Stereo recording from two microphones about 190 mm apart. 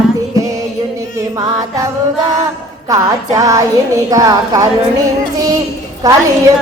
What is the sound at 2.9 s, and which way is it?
Music, 20° right (ahead or behind).